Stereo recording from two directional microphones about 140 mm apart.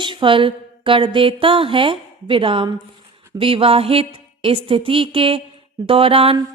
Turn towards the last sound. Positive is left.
turn(degrees=-40)  # may be behind; listen again after turning